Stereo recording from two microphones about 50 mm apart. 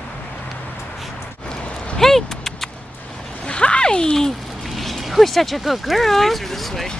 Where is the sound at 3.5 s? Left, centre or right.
Left.